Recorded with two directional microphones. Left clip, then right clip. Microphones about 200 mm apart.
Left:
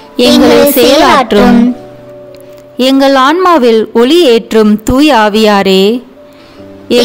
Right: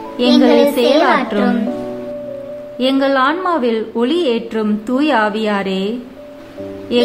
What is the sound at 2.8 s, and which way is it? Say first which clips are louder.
A woman's voice: left 8 dB; 50° left (ahead or behind).